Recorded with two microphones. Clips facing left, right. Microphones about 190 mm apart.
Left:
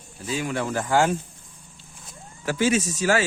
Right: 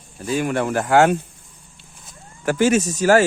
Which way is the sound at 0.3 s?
55° right (ahead or behind).